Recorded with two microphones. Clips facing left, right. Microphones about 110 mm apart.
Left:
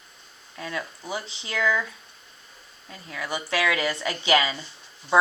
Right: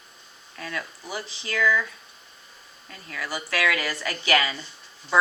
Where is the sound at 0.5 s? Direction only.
20° left (ahead or behind).